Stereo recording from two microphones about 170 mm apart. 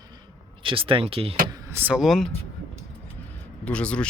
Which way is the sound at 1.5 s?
15° right (ahead or behind).